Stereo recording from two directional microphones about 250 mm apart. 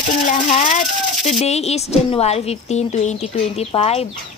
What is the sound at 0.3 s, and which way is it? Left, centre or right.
Speech, left.